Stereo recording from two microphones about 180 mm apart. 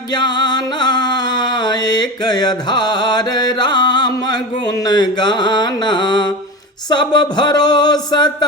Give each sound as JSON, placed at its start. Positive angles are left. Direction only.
{"t": 0.1, "sound": "music", "side_deg": 25}
{"t": 6.9, "sound": "speech", "side_deg": 25}